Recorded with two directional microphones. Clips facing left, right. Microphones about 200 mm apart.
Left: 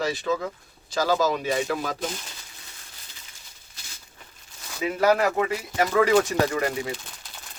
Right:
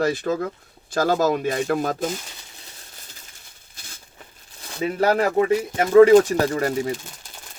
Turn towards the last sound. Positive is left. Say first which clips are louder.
# right 4 dB
turn(degrees=-40)  # may be behind; listen again after turning